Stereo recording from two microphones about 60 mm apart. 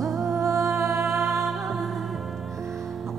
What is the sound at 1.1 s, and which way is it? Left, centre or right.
Music, centre.